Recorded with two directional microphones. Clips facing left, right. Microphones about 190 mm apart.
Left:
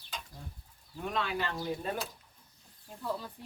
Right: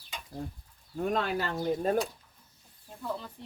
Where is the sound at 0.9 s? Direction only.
45° right (ahead or behind).